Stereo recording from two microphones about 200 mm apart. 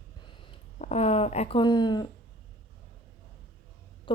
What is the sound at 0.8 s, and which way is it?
Speech, 30° left (ahead or behind).